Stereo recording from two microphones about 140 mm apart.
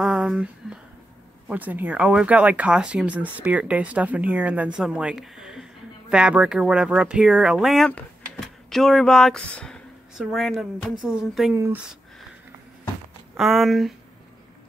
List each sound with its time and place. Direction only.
0.0 s speech: 5° right (ahead or behind)
11.5 s speech: 20° right (ahead or behind)
13.4 s speech: centre (ahead or behind)